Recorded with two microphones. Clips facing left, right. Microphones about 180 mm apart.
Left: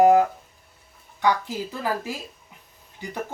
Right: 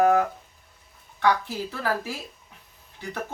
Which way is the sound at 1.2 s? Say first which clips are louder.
Even; 15° left (ahead or behind).